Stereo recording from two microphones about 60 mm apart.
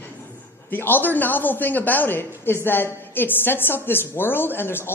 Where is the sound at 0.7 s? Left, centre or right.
Left.